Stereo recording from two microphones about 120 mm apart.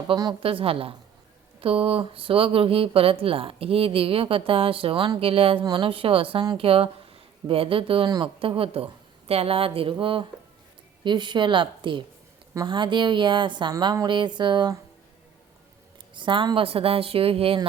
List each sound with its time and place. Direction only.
0.1 s a woman's voice: 40° right (ahead or behind)
16.1 s speech: 45° right (ahead or behind)